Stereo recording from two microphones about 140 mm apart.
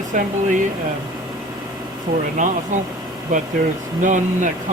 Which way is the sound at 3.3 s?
70° right (ahead or behind).